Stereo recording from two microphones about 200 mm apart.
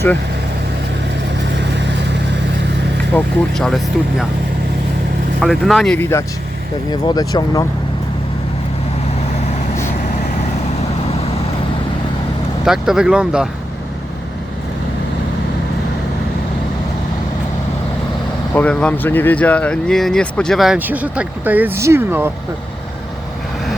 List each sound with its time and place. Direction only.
3.2 s speech: centre (ahead or behind)
5.4 s speech: centre (ahead or behind); by 7.6 s 20° left (ahead or behind)
12.6 s speech: centre (ahead or behind)
18.5 s speech: 5° left (ahead or behind); by 22.3 s 10° right (ahead or behind)